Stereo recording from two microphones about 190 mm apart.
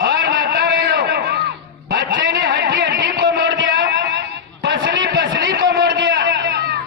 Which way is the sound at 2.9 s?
55° right (ahead or behind).